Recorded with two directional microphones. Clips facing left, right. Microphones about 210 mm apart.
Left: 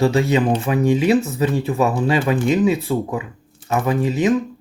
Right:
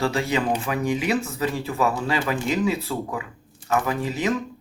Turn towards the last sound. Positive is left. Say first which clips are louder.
# left 7 dB
turn(degrees=20)  # may be behind; listen again after turning